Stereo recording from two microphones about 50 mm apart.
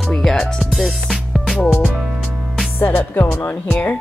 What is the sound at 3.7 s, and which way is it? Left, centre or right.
Speech, left.